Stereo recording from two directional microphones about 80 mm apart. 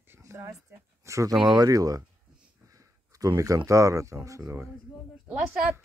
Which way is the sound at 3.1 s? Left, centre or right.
Right.